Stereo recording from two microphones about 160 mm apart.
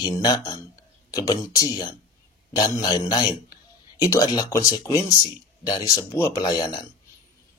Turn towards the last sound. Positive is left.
turn(degrees=25)  # may be behind; listen again after turning